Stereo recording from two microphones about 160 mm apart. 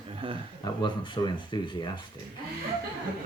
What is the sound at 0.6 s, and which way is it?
Speech, 30° left (ahead or behind).